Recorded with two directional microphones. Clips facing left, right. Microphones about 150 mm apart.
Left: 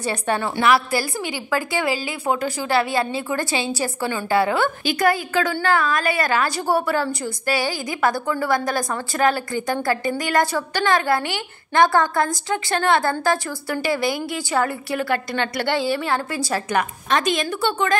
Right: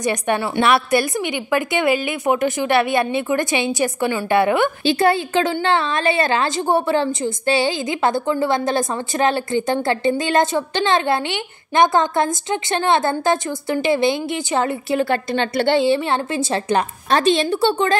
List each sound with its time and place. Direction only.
0.0 s a woman's voice: 15° right (ahead or behind)